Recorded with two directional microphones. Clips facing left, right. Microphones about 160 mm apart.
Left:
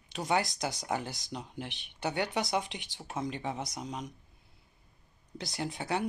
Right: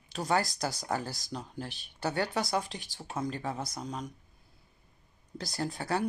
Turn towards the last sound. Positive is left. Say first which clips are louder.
# right 1 dB
turn(degrees=20)  # may be behind; listen again after turning